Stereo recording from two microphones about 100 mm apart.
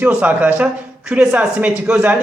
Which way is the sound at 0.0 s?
15° right (ahead or behind).